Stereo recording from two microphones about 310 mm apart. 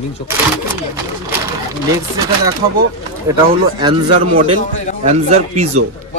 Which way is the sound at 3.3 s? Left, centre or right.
Centre.